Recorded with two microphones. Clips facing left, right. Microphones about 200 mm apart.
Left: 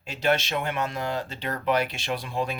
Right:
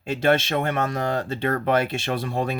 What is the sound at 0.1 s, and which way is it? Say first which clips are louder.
Speech: right 5 dB; 50° right (ahead or behind).